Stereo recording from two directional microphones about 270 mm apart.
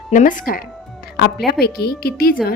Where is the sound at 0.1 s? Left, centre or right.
Left.